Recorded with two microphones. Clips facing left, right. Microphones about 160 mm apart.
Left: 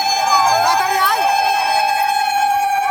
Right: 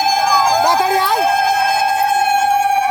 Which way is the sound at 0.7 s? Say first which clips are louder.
Right 2 dB; 25° right (ahead or behind).